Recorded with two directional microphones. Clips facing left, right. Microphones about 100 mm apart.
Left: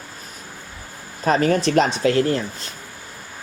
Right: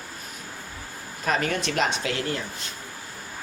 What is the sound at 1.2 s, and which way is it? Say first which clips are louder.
Speech: left 8 dB; 35° left (ahead or behind).